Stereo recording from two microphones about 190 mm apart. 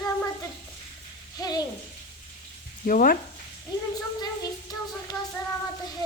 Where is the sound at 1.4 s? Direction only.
20° left (ahead or behind).